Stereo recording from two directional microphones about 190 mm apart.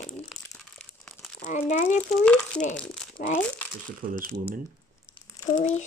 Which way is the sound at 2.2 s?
5° left (ahead or behind).